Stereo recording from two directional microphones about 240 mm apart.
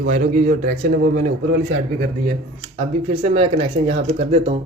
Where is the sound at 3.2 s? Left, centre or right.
Right.